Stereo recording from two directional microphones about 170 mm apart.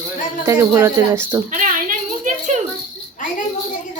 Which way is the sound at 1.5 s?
50° right (ahead or behind).